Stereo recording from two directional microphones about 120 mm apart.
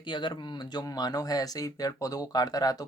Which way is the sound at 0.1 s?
40° left (ahead or behind).